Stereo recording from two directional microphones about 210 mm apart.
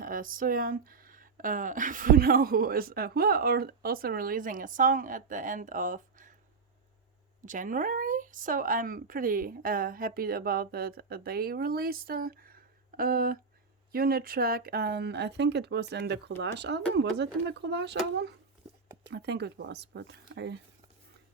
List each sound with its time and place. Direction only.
0.0 s speech: 40° right (ahead or behind)
7.4 s speech: 40° right (ahead or behind)